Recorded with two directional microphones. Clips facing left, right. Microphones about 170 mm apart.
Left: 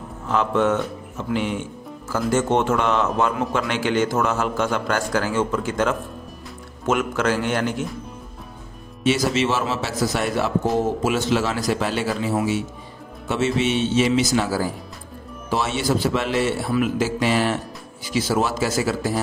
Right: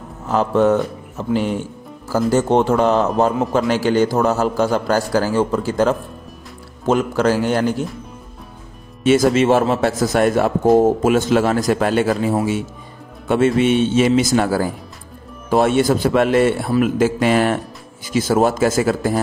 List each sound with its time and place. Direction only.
0.3 s speech: 35° right (ahead or behind)
9.0 s a man's voice: 50° right (ahead or behind)